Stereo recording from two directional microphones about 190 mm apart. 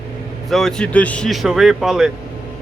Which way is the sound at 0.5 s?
5° left (ahead or behind).